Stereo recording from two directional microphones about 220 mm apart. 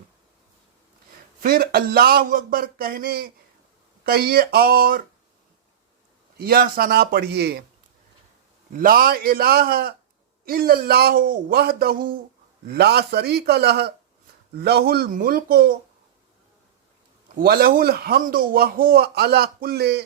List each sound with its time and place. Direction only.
1.4 s a man's voice: 45° right (ahead or behind)
6.4 s a man's voice: 45° right (ahead or behind)
8.7 s a man's voice: 40° right (ahead or behind)
17.4 s a man's voice: 45° right (ahead or behind)